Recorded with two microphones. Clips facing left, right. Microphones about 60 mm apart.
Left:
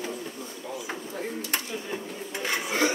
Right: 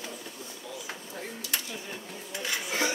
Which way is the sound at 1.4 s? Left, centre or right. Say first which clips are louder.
Left 4 dB; left.